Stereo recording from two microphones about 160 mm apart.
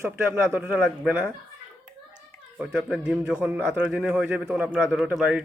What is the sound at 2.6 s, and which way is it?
A child's voice, 5° right (ahead or behind).